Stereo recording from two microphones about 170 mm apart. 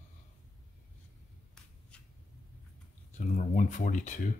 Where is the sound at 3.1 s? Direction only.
50° left (ahead or behind).